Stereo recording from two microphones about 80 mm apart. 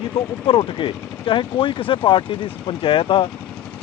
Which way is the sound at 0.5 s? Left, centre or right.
Left.